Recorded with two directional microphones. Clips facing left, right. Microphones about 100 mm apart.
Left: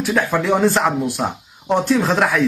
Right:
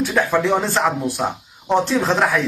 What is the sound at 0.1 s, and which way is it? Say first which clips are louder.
Speech: left 3 dB; 5° left (ahead or behind).